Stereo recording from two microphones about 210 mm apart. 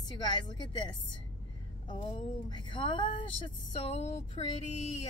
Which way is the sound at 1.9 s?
25° left (ahead or behind).